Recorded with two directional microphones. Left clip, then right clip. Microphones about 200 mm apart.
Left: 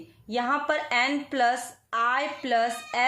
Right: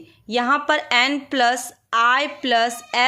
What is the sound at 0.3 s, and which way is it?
A woman's voice, 35° right (ahead or behind).